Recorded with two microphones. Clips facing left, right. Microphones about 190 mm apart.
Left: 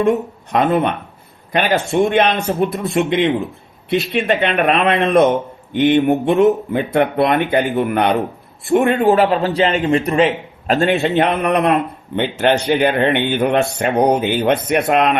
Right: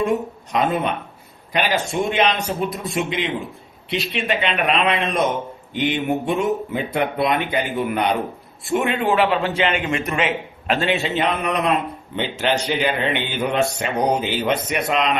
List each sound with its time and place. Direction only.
0.5 s a man's voice: 55° left (ahead or behind); by 10.8 s 35° left (ahead or behind)
10.8 s a man's voice: 50° left (ahead or behind)